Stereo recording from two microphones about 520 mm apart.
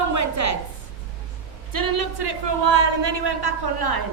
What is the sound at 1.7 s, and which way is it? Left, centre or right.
A man's voice, right.